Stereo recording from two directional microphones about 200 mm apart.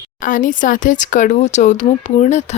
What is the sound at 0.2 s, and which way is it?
Speech, 40° left (ahead or behind).